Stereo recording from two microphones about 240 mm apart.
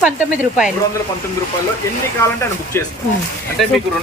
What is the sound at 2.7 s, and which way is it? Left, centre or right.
Speech, centre.